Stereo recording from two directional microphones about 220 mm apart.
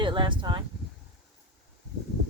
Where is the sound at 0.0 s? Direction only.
20° right (ahead or behind).